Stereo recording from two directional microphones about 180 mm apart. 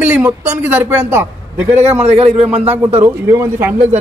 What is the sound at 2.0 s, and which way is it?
Speech, 35° right (ahead or behind).